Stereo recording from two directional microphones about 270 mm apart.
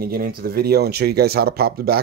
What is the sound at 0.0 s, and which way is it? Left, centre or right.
Speech, right.